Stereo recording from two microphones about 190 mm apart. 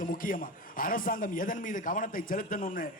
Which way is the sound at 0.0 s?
45° left (ahead or behind).